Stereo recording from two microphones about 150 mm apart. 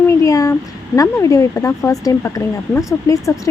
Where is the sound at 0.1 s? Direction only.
20° left (ahead or behind).